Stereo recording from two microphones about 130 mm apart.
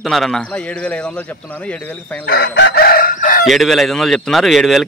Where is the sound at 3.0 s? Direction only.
90° left.